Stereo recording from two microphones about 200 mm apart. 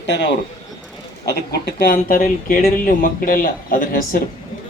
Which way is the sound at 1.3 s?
55° left (ahead or behind).